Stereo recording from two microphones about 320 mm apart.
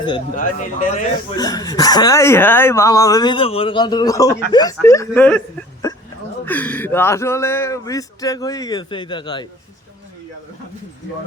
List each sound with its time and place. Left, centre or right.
0.0 s speech: centre
1.4 s speech: centre